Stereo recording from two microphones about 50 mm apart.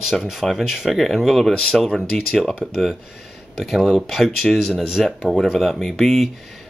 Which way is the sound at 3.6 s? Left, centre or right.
Centre.